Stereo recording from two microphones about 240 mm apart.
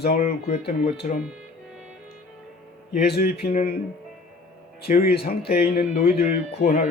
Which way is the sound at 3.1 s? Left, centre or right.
Left.